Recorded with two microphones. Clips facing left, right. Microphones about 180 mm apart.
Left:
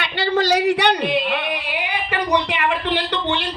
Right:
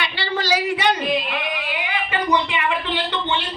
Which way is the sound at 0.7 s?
70° left (ahead or behind).